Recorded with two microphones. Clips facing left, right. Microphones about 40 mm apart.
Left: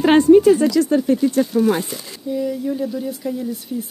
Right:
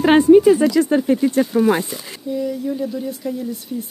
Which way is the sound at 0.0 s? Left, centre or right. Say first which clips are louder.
Even; centre.